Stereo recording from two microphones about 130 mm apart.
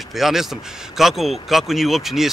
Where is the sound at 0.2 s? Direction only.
Centre (ahead or behind).